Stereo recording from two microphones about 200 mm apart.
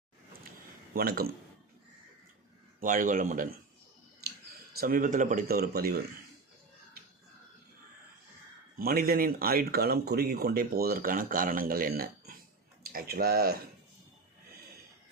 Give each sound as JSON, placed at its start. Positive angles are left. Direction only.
{"t": 0.9, "sound": "speech", "side_deg": -50}
{"t": 2.8, "sound": "a man's voice", "side_deg": -40}
{"t": 4.8, "sound": "speech", "side_deg": -45}
{"t": 8.8, "sound": "speech", "side_deg": -50}